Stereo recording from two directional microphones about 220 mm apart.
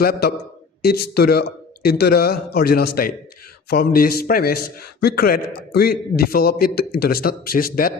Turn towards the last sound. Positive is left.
turn(degrees=40)  # may be behind; listen again after turning